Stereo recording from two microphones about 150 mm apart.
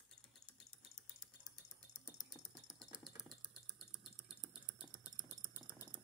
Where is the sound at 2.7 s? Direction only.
Centre (ahead or behind).